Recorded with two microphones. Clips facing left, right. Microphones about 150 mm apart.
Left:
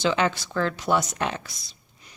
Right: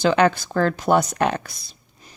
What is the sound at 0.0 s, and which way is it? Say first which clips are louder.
Speech: right 6 dB; 55° right (ahead or behind).